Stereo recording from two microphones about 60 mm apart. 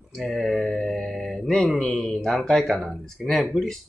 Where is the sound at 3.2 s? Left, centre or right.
Centre.